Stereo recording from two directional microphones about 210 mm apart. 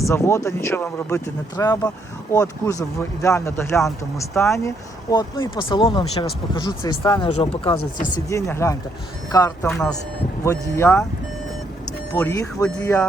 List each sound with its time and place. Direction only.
0.0 s speech: 15° left (ahead or behind)
8.3 s speech: 15° left (ahead or behind)
9.6 s speech: 5° left (ahead or behind)
12.2 s speech: 15° left (ahead or behind)